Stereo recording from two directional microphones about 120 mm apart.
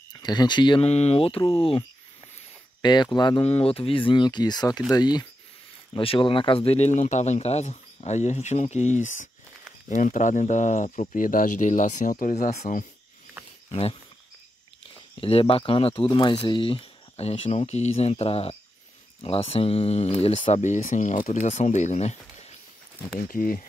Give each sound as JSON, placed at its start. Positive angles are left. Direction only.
{"t": 0.1, "sound": "speech", "side_deg": 35}
{"t": 0.8, "sound": "speech", "side_deg": 65}
{"t": 2.8, "sound": "speech", "side_deg": 40}
{"t": 3.4, "sound": "speech", "side_deg": 55}
{"t": 13.7, "sound": "speech", "side_deg": 55}
{"t": 15.1, "sound": "speech", "side_deg": 50}
{"t": 20.3, "sound": "speech", "side_deg": 75}